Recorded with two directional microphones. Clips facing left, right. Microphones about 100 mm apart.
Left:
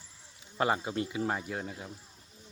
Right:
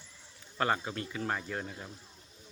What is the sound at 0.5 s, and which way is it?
Speech, 15° left (ahead or behind).